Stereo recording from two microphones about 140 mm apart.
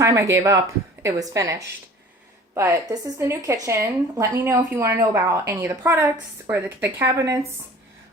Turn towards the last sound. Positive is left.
turn(degrees=-20)  # may be behind; listen again after turning